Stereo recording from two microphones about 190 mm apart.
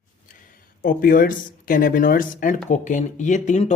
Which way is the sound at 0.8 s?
45° left (ahead or behind).